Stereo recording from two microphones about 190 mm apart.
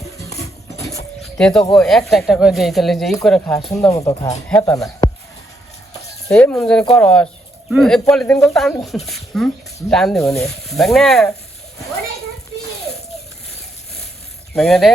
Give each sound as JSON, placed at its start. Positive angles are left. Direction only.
{"t": 1.2, "sound": "music", "side_deg": 5}
{"t": 1.7, "sound": "speech", "side_deg": 0}
{"t": 3.8, "sound": "speech", "side_deg": 15}
{"t": 6.3, "sound": "speech", "side_deg": 5}
{"t": 14.5, "sound": "speech", "side_deg": 0}